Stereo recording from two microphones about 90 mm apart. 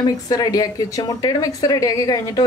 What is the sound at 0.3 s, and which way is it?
A woman's voice, 45° left (ahead or behind).